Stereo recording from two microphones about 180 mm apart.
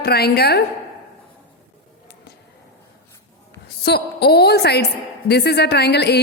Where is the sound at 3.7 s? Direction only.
65° left (ahead or behind).